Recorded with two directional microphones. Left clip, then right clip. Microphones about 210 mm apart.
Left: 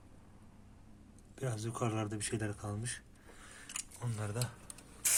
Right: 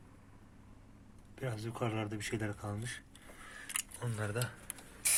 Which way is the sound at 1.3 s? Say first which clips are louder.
Left 1 dB; 15° left (ahead or behind).